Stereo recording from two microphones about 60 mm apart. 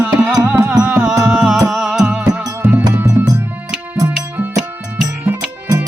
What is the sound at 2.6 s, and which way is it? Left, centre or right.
Music, right.